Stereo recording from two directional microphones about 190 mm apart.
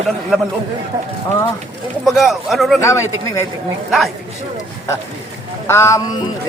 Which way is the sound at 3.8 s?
Centre (ahead or behind).